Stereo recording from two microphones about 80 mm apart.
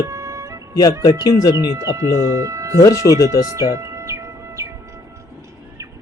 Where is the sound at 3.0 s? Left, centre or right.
Left.